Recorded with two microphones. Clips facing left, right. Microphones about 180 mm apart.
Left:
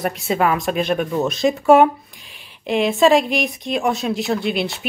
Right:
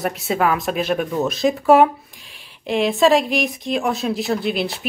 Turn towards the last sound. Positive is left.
turn(degrees=0)  # may be behind; listen again after turning